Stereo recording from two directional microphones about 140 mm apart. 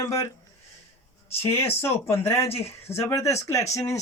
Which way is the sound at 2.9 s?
20° left (ahead or behind).